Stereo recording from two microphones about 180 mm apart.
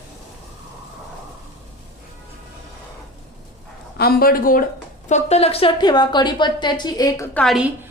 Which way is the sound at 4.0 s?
60° left (ahead or behind).